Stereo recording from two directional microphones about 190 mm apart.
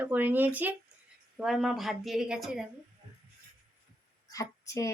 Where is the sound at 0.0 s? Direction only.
10° right (ahead or behind).